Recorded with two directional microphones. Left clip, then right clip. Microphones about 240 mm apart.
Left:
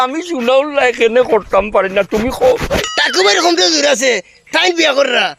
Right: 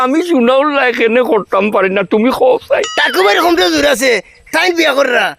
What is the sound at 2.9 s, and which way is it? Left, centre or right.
Speech, centre.